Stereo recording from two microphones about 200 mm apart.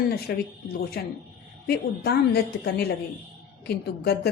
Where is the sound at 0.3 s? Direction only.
55° left (ahead or behind).